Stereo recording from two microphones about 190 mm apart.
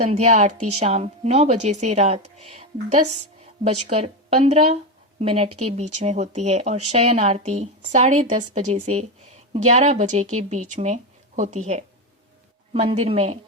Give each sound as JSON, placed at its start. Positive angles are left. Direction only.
{"t": 0.0, "sound": "speech", "side_deg": -35}